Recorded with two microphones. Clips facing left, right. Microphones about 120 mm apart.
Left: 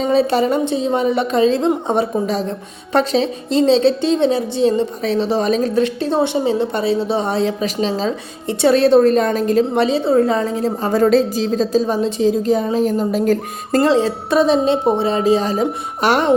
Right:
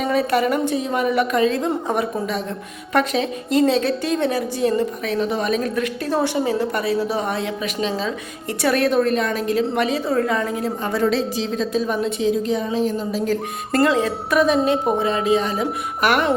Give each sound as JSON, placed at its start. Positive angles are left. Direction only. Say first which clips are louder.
{"t": 0.0, "sound": "a woman's voice", "louder": "left 4 dB", "side_deg": 25}
{"t": 13.7, "sound": "a woman's voice", "louder": "left 4 dB", "side_deg": 30}